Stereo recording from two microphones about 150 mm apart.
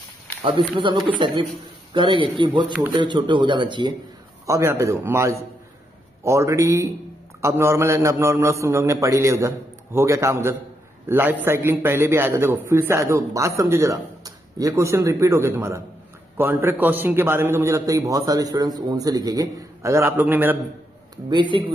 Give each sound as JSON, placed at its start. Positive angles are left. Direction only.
{"t": 0.4, "sound": "a man's voice", "side_deg": -35}
{"t": 4.5, "sound": "a man's voice", "side_deg": -20}
{"t": 21.3, "sound": "a man's voice", "side_deg": -30}